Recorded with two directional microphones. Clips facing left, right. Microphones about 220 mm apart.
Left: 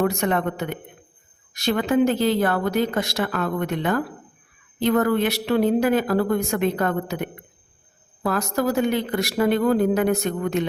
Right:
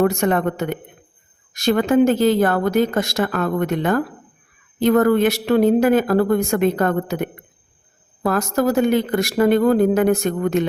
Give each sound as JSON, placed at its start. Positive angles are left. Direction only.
{"t": 0.0, "sound": "speech", "side_deg": -50}